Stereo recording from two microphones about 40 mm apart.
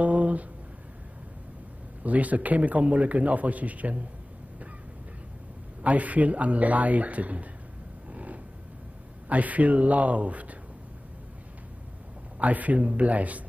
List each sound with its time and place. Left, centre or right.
0.0 s a sound: right
2.0 s a man's voice: right
5.8 s a man's voice: right
8.1 s a sound: right
9.3 s a man's voice: right
12.4 s a man's voice: right